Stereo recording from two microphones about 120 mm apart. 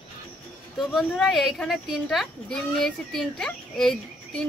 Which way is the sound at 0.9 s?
Centre (ahead or behind).